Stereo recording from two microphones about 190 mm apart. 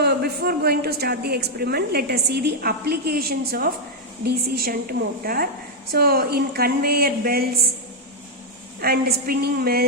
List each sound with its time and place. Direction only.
0.0 s a woman's voice: 55° right (ahead or behind)
8.8 s a woman's voice: 55° right (ahead or behind)